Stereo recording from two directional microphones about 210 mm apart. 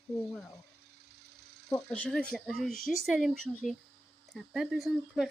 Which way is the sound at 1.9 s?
5° left (ahead or behind).